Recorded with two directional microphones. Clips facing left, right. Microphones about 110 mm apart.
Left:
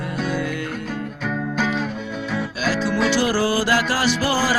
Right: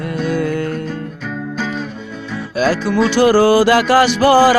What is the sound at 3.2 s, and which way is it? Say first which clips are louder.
Music: right 9 dB; 60° right (ahead or behind).